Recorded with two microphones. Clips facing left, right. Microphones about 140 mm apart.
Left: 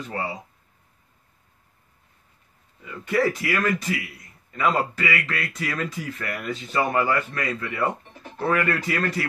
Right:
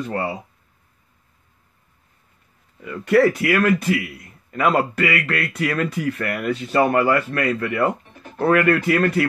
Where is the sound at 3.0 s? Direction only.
70° right (ahead or behind).